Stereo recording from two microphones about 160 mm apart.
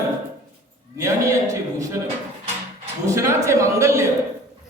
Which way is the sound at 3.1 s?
20° right (ahead or behind).